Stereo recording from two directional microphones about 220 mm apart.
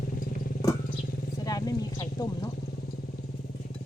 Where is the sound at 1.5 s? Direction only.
15° left (ahead or behind).